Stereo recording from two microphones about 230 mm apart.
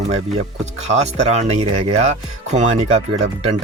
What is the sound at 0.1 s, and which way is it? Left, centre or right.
Speech, right.